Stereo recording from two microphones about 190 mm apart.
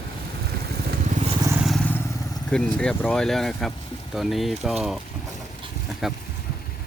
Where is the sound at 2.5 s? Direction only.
5° left (ahead or behind).